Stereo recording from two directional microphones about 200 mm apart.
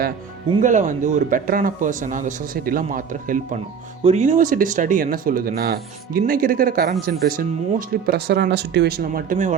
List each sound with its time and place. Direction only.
0.6 s a man's voice: 40° right (ahead or behind)